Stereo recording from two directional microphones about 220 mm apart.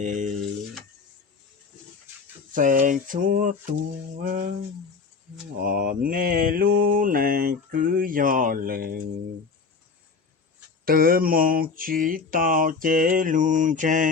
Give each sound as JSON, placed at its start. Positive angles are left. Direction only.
{"t": 0.0, "sound": "speech", "side_deg": -35}
{"t": 2.6, "sound": "mantra", "side_deg": -35}
{"t": 5.6, "sound": "mantra", "side_deg": -40}
{"t": 10.8, "sound": "mantra", "side_deg": -40}